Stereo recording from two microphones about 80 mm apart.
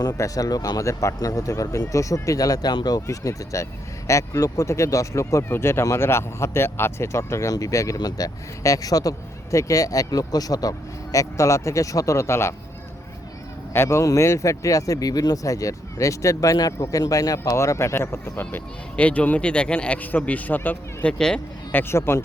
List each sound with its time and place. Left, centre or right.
0.2 s speech: left
13.7 s speech: left
16.7 s speech: left; by 21.4 s centre
21.7 s speech: left